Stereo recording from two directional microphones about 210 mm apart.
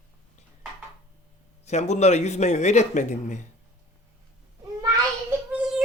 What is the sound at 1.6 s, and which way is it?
Speech, 30° left (ahead or behind).